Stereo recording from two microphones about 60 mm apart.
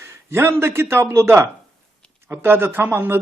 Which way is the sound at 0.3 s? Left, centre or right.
Right.